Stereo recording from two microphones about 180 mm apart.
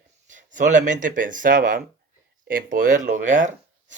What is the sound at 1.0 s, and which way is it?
Speech, 45° right (ahead or behind).